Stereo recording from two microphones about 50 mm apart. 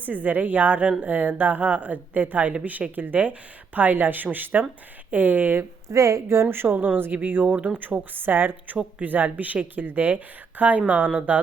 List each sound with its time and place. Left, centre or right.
0.0 s speech: right
5.9 s a woman's voice: right